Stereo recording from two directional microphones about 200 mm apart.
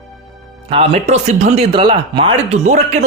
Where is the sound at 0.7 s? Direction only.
30° right (ahead or behind).